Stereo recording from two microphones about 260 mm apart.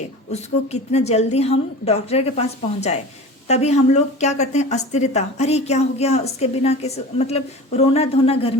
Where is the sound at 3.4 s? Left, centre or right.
Left.